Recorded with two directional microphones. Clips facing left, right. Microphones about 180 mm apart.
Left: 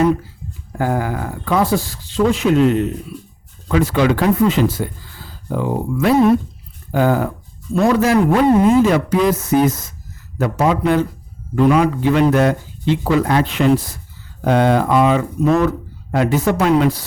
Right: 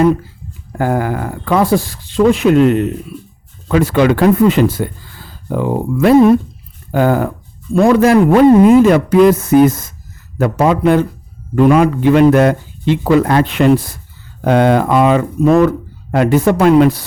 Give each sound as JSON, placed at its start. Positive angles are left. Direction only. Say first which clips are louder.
{"t": 0.8, "sound": "speech", "louder": "right 4 dB", "side_deg": -55}